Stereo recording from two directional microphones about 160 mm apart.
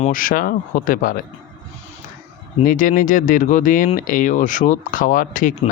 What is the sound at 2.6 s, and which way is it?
Speech, 55° left (ahead or behind).